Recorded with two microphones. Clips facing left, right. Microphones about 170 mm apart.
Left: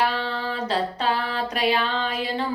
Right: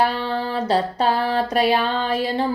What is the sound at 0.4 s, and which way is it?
Female singing, 40° right (ahead or behind).